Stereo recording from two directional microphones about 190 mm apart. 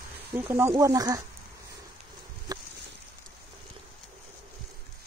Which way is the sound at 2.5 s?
20° right (ahead or behind).